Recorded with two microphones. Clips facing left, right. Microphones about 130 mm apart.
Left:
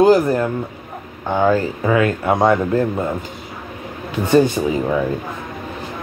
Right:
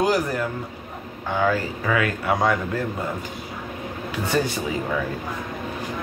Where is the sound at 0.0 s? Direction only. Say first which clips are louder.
Left 9 dB; 30° left (ahead or behind).